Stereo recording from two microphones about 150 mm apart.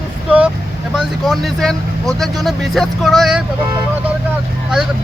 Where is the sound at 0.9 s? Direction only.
Centre (ahead or behind).